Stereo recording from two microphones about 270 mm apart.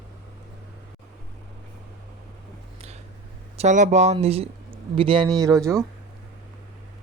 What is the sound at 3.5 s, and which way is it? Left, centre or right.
Speech, right.